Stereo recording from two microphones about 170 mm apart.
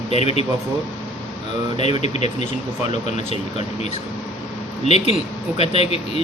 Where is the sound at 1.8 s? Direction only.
40° left (ahead or behind).